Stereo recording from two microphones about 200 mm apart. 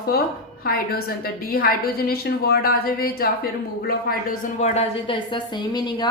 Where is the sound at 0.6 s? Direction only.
50° left (ahead or behind).